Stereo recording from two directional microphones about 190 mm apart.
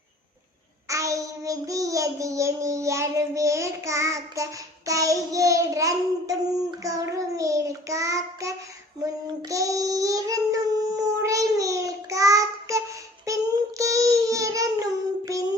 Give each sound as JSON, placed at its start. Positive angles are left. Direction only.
{"t": 0.9, "sound": "child singing", "side_deg": -15}